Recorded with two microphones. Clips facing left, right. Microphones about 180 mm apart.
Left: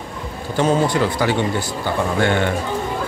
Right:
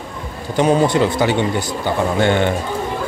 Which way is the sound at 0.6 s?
20° right (ahead or behind).